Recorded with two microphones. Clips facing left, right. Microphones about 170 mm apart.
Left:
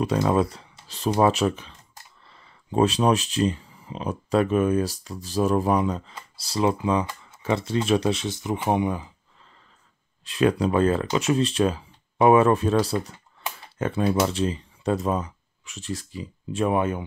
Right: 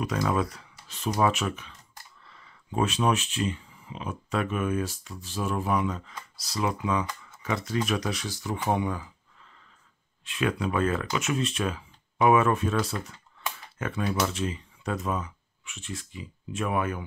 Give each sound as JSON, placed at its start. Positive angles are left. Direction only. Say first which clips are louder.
{"t": 0.0, "sound": "speech", "louder": "left 5 dB", "side_deg": 30}
{"t": 10.2, "sound": "speech", "louder": "left 7 dB", "side_deg": 35}